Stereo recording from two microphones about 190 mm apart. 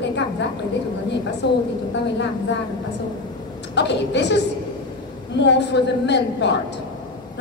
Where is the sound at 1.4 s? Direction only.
65° left (ahead or behind).